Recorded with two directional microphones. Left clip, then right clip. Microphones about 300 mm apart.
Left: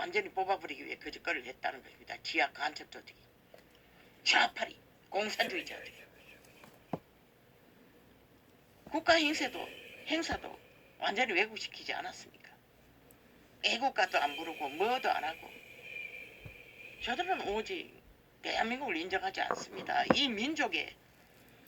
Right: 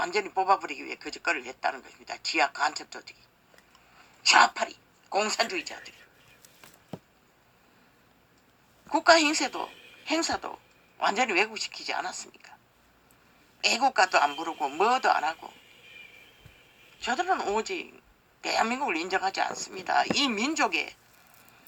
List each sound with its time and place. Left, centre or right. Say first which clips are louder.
0.0 s a man's voice: right 7 dB; right
4.2 s speech: right 8 dB; right
8.9 s a man's voice: right 8 dB; right
13.6 s a man's voice: right 8 dB; right
17.0 s a man's voice: right 7 dB; right